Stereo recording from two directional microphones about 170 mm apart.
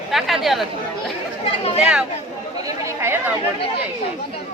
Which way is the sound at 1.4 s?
35° left (ahead or behind).